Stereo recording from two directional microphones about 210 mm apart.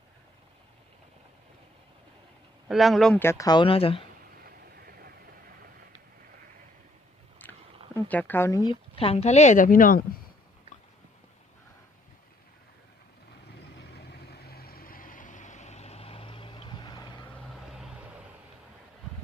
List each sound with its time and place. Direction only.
2.6 s speech: centre (ahead or behind); by 4.0 s 25° left (ahead or behind)
4.4 s vehicle: 45° right (ahead or behind)
7.4 s chewing: 10° left (ahead or behind)
7.9 s speech: 5° left (ahead or behind)
9.0 s a woman's voice: 30° left (ahead or behind)
13.6 s vehicle: 50° left (ahead or behind); by 17.1 s 20° left (ahead or behind)
17.5 s vehicle: centre (ahead or behind)